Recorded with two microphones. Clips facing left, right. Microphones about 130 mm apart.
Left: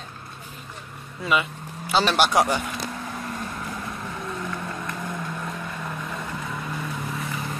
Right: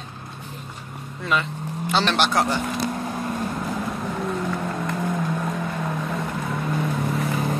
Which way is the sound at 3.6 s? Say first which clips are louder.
Right 6 dB; 35° right (ahead or behind).